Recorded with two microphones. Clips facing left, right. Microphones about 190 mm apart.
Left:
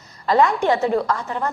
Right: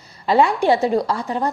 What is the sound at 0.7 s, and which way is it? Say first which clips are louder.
Speech: right 2 dB; 15° right (ahead or behind).